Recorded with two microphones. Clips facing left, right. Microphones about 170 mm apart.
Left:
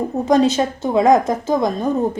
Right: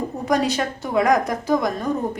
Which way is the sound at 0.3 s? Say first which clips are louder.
Left 6 dB; 25° left (ahead or behind).